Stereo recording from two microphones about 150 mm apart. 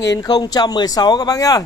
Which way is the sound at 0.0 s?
25° left (ahead or behind).